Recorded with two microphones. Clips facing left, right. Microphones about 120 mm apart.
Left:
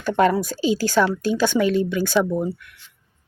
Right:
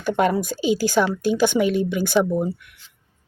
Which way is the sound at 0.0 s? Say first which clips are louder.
Left 1 dB; 15° right (ahead or behind).